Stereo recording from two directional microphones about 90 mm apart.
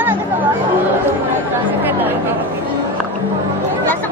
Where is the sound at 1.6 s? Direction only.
20° right (ahead or behind).